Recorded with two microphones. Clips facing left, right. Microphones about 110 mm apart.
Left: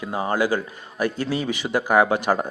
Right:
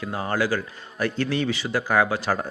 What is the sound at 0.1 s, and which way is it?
A man's voice, 15° left (ahead or behind).